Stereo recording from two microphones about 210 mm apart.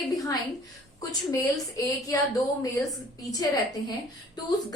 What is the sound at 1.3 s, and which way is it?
Speech, 15° left (ahead or behind).